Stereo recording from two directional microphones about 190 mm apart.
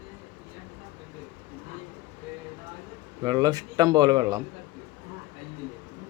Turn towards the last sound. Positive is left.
turn(degrees=-20)  # may be behind; listen again after turning